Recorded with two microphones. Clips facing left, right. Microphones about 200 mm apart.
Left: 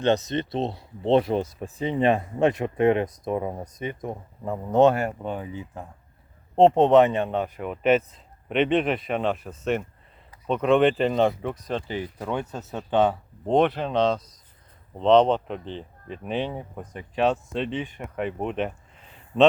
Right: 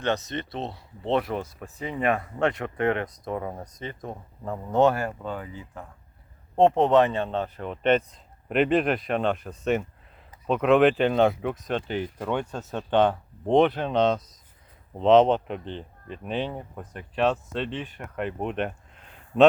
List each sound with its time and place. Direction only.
0.0 s speech: 20° left (ahead or behind); by 17.8 s centre (ahead or behind)
17.8 s speech: 10° left (ahead or behind)
18.2 s speech: centre (ahead or behind)